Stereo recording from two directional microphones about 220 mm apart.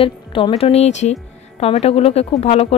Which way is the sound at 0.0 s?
25° left (ahead or behind).